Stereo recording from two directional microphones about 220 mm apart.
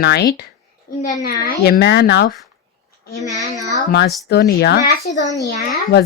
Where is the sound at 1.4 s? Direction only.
45° left (ahead or behind).